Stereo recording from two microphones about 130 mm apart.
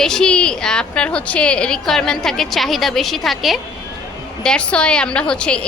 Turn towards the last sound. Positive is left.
turn(degrees=10)  # may be behind; listen again after turning